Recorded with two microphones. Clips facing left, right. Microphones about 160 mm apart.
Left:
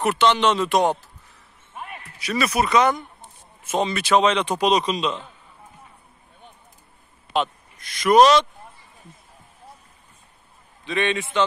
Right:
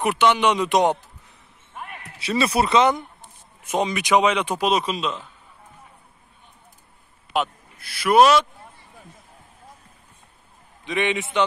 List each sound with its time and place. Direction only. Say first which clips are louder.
0.0 s speech: even; 10° right (ahead or behind)
2.1 s speech: right 1 dB; 25° right (ahead or behind); by 5.2 s 5° right (ahead or behind)
7.3 s speech: left 1 dB; 5° right (ahead or behind)
10.9 s speech: even; 15° right (ahead or behind)